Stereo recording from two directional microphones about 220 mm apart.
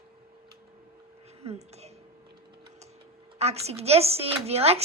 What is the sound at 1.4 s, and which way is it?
Speech, 30° right (ahead or behind).